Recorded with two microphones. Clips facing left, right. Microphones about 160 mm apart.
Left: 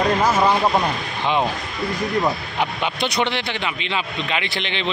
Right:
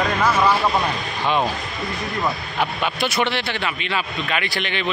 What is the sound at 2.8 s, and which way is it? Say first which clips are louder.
Speech: even; 20° left (ahead or behind).